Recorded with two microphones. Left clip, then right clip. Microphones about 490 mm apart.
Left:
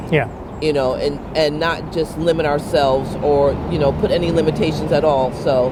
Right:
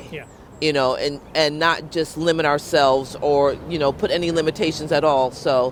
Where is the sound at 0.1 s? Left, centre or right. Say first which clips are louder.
Left 18 dB; left.